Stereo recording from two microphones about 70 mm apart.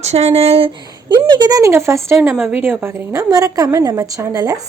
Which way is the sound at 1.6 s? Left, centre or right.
Right.